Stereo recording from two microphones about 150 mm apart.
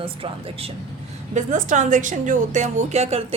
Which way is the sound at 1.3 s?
55° right (ahead or behind).